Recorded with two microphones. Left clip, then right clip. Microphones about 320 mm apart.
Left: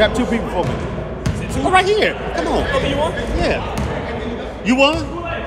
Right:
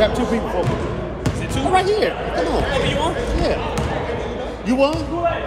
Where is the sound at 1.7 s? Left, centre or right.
Left.